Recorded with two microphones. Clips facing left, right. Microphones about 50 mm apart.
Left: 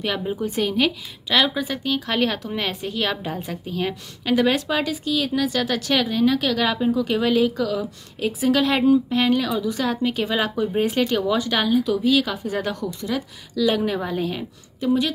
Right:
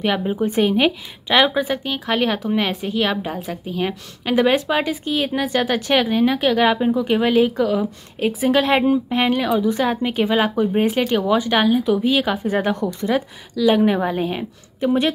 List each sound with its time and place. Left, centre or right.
0.0 s a woman's voice: right
13.6 s a woman's voice: centre; by 15.1 s right